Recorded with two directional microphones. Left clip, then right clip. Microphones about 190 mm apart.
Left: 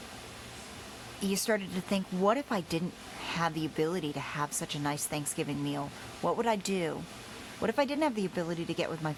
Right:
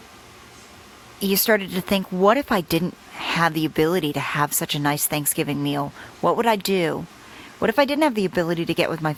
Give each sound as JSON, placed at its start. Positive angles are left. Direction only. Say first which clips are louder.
{"t": 1.2, "sound": "speech", "louder": "right 11 dB", "side_deg": -30}